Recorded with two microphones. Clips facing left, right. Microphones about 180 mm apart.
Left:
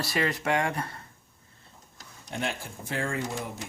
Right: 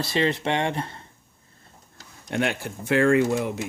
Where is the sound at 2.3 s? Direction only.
75° right (ahead or behind).